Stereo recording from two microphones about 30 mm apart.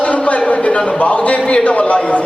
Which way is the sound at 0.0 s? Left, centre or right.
Left.